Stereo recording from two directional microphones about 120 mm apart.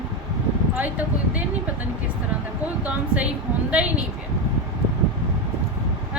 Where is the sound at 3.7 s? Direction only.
10° right (ahead or behind).